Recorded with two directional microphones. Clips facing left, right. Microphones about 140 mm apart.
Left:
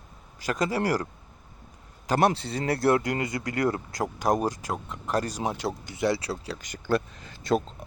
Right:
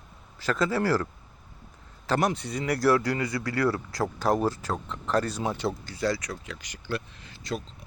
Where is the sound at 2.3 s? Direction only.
30° left (ahead or behind); by 5.9 s 10° left (ahead or behind).